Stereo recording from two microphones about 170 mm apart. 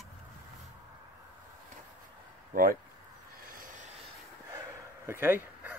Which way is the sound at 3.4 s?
55° right (ahead or behind).